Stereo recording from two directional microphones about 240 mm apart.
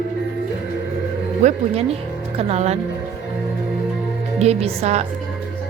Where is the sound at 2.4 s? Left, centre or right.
Right.